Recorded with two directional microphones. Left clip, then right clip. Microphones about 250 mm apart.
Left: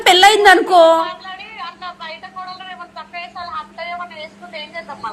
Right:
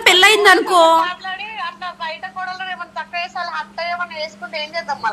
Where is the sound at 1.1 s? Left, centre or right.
Right.